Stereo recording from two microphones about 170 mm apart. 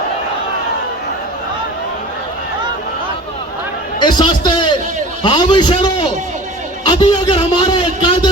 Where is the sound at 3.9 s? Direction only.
25° left (ahead or behind).